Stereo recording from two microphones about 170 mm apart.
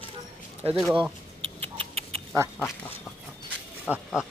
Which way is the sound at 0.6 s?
35° right (ahead or behind).